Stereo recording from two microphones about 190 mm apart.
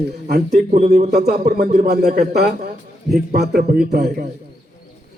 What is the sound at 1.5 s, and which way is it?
A man's voice, 55° right (ahead or behind).